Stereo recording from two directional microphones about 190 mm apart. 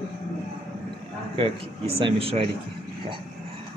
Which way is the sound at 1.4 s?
30° right (ahead or behind).